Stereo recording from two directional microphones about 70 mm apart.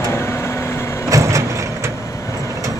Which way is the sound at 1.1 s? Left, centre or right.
Right.